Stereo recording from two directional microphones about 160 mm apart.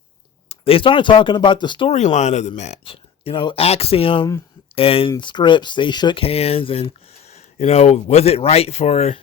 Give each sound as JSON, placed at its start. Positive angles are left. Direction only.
{"t": 0.4, "sound": "speech", "side_deg": 35}
{"t": 1.9, "sound": "speech", "side_deg": 45}